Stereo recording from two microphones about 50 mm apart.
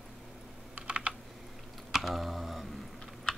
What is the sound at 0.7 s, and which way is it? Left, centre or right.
Computer keyboard, right.